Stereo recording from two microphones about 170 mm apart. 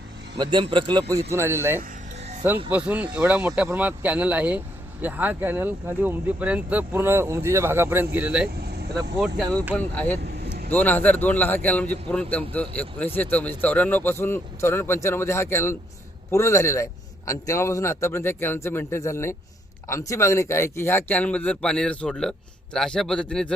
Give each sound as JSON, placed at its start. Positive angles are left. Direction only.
{"t": 0.3, "sound": "speech", "side_deg": -30}
{"t": 1.3, "sound": "speech", "side_deg": -15}
{"t": 8.6, "sound": "vehicle", "side_deg": -70}
{"t": 9.1, "sound": "speech", "side_deg": -5}
{"t": 9.7, "sound": "speech", "side_deg": 5}
{"t": 10.2, "sound": "vehicle", "side_deg": -70}
{"t": 10.7, "sound": "speech", "side_deg": 10}